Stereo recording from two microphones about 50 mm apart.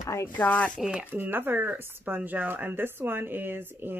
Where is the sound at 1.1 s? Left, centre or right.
Right.